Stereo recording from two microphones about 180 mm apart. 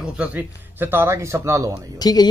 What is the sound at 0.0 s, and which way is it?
Speech, 5° right (ahead or behind).